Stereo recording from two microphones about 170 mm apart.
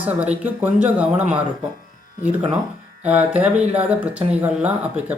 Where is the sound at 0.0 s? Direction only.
10° right (ahead or behind).